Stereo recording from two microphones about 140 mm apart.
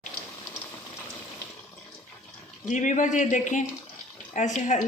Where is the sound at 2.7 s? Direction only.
60° left (ahead or behind).